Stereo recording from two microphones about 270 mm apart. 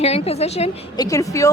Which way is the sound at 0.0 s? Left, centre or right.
Left.